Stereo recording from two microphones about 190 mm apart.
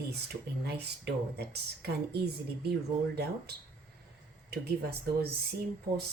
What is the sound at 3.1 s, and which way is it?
Speech, 60° right (ahead or behind).